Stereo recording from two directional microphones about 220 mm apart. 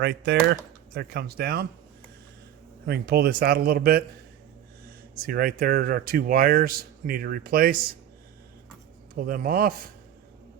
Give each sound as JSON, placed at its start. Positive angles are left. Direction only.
{"t": 0.0, "sound": "a man's voice", "side_deg": -45}
{"t": 2.8, "sound": "a man's voice", "side_deg": -45}
{"t": 5.1, "sound": "speech", "side_deg": -40}
{"t": 9.1, "sound": "speech", "side_deg": -40}